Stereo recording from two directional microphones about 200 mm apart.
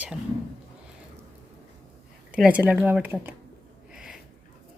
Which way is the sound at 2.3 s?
5° right (ahead or behind).